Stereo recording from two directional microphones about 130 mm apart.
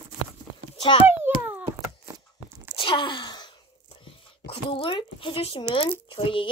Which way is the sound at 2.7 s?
40° left (ahead or behind).